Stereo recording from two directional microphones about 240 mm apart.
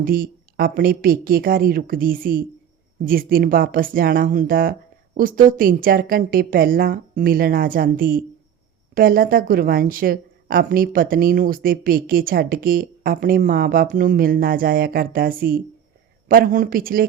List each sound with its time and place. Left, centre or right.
0.0 s a woman's voice: right